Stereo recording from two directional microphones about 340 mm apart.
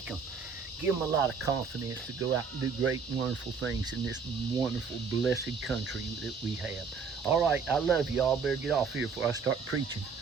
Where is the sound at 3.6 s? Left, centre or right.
Right.